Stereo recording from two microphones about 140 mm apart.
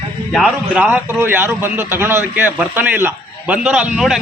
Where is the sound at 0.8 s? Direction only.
15° right (ahead or behind).